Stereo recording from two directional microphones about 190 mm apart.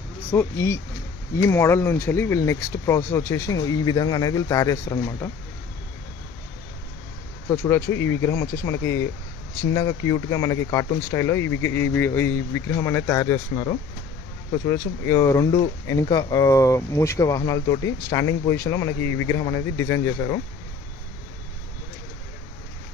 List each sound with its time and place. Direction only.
0.3 s speech: 15° left (ahead or behind)
7.4 s speech: 15° left (ahead or behind)